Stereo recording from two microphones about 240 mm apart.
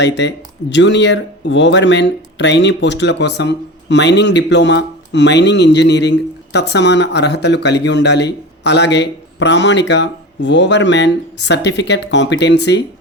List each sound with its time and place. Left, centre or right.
0.0 s speech: left